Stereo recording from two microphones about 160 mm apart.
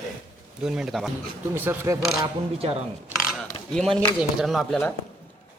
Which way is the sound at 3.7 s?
5° left (ahead or behind).